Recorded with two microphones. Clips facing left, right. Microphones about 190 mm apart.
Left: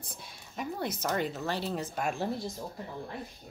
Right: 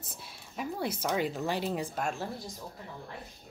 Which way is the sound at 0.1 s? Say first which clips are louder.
Even; 5° right (ahead or behind).